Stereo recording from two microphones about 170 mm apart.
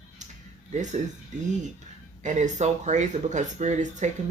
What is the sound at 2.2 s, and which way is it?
Speech, 45° right (ahead or behind).